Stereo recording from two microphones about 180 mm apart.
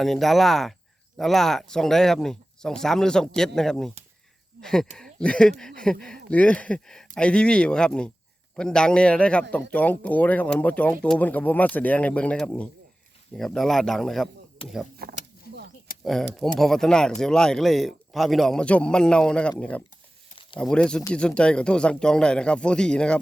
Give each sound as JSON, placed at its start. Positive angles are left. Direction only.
{"t": 0.0, "sound": "speech", "side_deg": 0}
{"t": 14.6, "sound": "speech", "side_deg": 30}
{"t": 15.0, "sound": "speech", "side_deg": -55}
{"t": 15.9, "sound": "a sound", "side_deg": 50}
{"t": 16.6, "sound": "speech", "side_deg": 0}